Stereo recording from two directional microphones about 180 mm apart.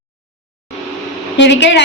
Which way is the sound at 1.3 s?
80° left.